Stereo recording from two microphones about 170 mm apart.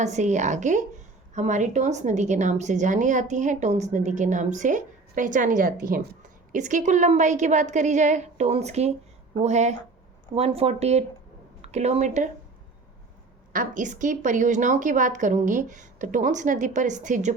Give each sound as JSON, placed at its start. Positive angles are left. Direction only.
{"t": 0.0, "sound": "a woman's voice", "side_deg": -45}
{"t": 13.5, "sound": "a woman's voice", "side_deg": -50}